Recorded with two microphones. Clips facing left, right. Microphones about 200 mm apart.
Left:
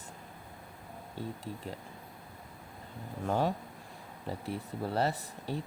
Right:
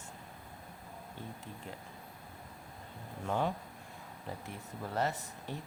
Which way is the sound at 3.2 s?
35° left (ahead or behind).